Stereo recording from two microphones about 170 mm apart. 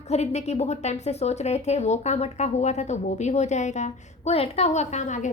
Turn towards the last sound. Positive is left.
turn(degrees=45)  # may be behind; listen again after turning